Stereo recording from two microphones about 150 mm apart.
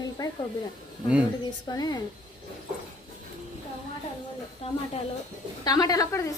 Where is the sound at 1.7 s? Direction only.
25° left (ahead or behind).